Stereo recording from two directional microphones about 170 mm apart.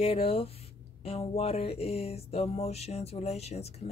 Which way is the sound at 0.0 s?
35° left (ahead or behind).